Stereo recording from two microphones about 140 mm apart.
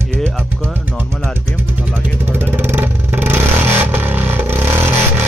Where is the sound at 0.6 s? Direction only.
15° right (ahead or behind).